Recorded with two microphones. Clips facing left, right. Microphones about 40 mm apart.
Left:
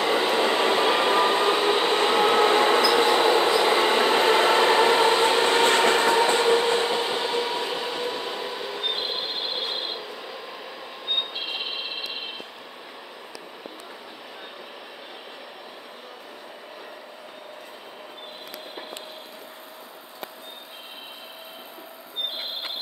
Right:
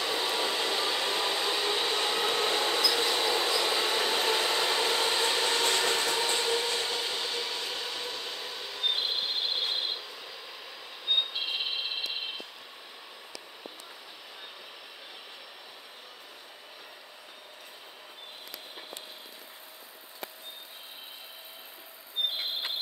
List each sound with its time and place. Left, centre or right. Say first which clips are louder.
0.0 s train: left 8 dB; left; by 10.0 s centre
10.0 s train: left 7 dB; left
11.1 s a sound: left 1 dB; centre